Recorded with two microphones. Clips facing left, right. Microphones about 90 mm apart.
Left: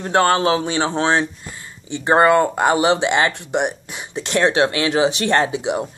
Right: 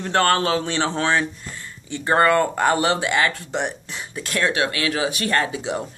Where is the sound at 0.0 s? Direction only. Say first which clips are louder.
Left 3 dB; 15° left (ahead or behind).